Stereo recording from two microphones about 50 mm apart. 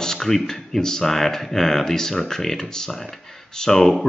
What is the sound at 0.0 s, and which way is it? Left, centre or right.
Speech, centre.